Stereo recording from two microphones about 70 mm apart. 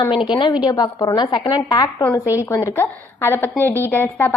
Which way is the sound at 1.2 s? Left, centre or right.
Left.